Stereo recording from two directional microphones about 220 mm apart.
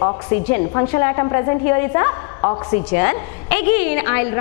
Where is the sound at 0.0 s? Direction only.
20° left (ahead or behind).